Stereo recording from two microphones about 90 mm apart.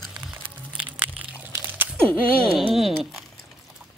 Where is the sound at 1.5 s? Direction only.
20° right (ahead or behind).